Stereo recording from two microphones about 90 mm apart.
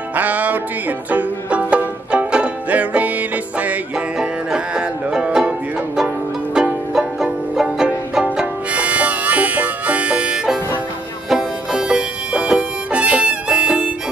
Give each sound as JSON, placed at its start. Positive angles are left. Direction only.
{"t": 0.1, "sound": "music", "side_deg": -15}
{"t": 6.5, "sound": "music", "side_deg": -5}